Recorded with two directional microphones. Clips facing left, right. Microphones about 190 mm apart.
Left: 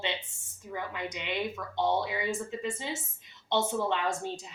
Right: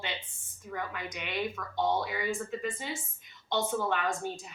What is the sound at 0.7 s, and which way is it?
Speech, 20° left (ahead or behind).